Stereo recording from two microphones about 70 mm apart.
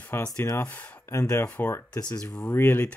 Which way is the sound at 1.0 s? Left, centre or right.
Left.